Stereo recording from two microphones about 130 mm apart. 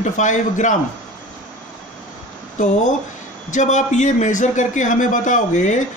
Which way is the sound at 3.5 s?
70° left (ahead or behind).